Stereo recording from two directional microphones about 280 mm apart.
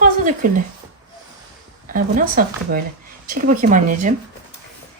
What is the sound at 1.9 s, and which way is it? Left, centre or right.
Speech, right.